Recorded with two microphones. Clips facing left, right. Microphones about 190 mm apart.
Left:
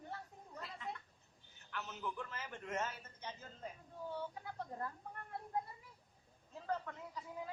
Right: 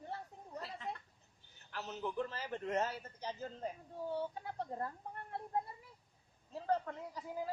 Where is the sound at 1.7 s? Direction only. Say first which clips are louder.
Right 3 dB; 35° right (ahead or behind).